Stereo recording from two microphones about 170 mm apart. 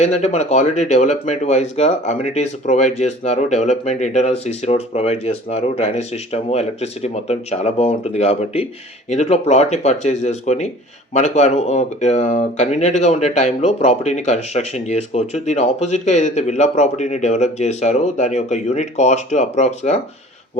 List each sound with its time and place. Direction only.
0.0 s speech: 40° left (ahead or behind)